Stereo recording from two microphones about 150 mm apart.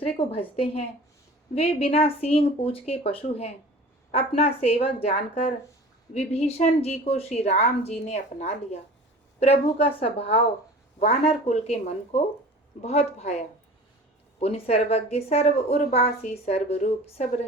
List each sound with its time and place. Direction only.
0.2 s a woman's voice: 40° left (ahead or behind)